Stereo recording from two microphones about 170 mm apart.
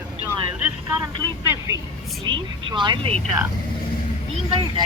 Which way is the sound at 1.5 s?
15° right (ahead or behind).